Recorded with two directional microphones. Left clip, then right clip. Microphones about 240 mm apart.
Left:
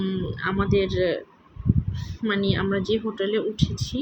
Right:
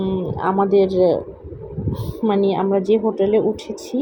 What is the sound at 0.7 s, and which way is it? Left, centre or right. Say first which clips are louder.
Speech: right 7 dB; centre.